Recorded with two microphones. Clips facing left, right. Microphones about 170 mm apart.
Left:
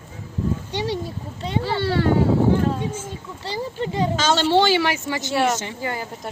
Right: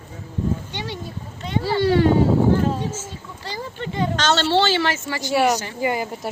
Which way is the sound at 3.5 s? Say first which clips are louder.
Left 4 dB; 30° left (ahead or behind).